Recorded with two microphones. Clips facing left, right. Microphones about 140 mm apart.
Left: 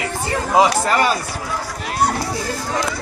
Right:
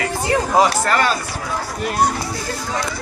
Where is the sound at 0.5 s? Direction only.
10° left (ahead or behind).